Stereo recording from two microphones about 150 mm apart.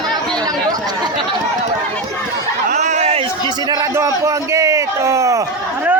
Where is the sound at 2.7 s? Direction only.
50° right (ahead or behind).